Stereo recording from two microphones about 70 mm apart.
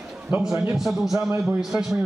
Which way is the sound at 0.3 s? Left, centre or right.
Centre.